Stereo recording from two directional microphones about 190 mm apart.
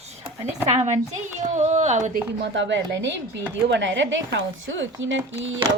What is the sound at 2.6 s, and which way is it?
Speech, 70° right (ahead or behind).